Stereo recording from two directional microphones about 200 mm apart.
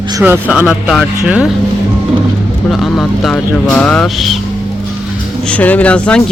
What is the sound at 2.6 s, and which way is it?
Speech, centre (ahead or behind).